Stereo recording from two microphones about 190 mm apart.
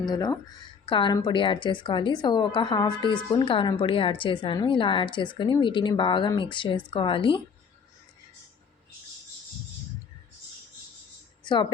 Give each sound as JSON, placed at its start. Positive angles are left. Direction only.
{"t": 0.1, "sound": "a woman's voice", "side_deg": 20}
{"t": 11.4, "sound": "a woman's voice", "side_deg": 25}